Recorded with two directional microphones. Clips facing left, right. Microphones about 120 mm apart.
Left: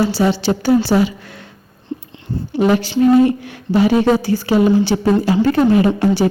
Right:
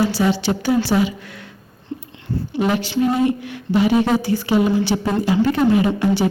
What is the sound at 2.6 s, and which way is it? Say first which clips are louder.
A woman's voice: left 5 dB; 40° left (ahead or behind).